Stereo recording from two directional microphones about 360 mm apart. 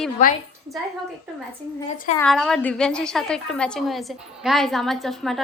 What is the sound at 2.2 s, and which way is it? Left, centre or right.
A woman's voice, centre.